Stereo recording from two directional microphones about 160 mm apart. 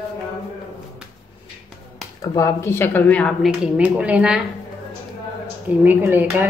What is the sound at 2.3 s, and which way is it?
A woman's voice, 20° left (ahead or behind).